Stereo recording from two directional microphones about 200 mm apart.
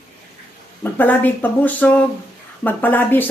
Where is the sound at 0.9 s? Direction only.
10° left (ahead or behind).